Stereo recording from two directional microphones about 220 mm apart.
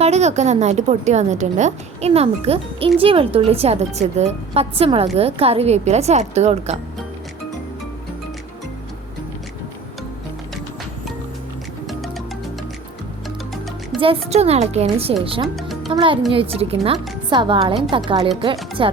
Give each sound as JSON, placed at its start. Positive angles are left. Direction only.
{"t": 0.0, "sound": "a woman's voice", "side_deg": -30}
{"t": 11.9, "sound": "music", "side_deg": 0}
{"t": 14.0, "sound": "a woman's voice", "side_deg": -25}
{"t": 15.5, "sound": "music", "side_deg": 0}
{"t": 15.9, "sound": "a woman's voice", "side_deg": -25}